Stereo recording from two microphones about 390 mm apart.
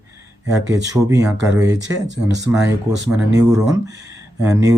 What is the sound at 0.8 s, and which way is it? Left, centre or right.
Speech, centre.